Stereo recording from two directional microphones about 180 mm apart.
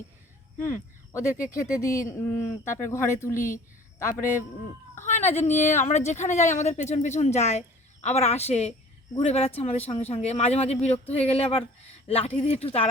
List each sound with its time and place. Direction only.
0.6 s speech: 15° left (ahead or behind)
5.0 s a sound: 40° left (ahead or behind)
5.3 s speech: 10° left (ahead or behind)
5.8 s speech: 40° left (ahead or behind)